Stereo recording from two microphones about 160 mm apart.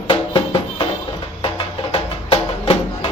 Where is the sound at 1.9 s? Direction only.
35° left (ahead or behind).